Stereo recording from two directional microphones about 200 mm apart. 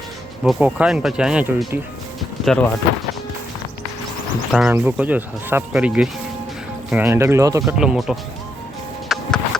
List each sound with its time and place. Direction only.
0.4 s speech: 5° right (ahead or behind)
2.4 s speech: 5° left (ahead or behind)
4.7 s speech: 10° right (ahead or behind)
7.6 s speech: 5° right (ahead or behind)
9.0 s music: 5° left (ahead or behind)